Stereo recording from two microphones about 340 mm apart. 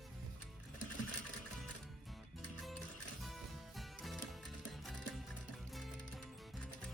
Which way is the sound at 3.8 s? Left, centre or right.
Centre.